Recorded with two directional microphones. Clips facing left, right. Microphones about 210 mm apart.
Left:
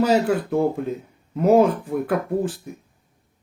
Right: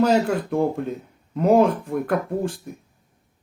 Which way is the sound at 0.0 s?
5° left (ahead or behind).